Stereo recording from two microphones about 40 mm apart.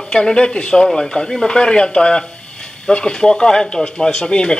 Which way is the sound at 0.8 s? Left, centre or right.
Centre.